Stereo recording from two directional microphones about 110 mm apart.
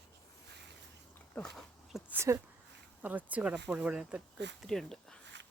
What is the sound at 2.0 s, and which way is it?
Speech, 25° right (ahead or behind).